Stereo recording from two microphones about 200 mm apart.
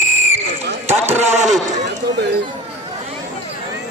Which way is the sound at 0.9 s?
30° right (ahead or behind).